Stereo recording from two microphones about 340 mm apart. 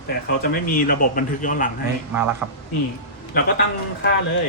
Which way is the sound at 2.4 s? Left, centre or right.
Centre.